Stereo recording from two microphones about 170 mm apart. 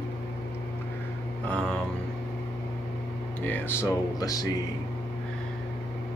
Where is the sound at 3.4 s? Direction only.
10° left (ahead or behind).